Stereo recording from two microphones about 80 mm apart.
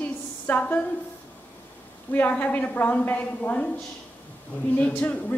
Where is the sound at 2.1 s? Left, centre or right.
Left.